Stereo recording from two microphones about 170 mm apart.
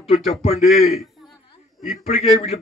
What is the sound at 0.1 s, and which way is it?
Speech, 35° left (ahead or behind).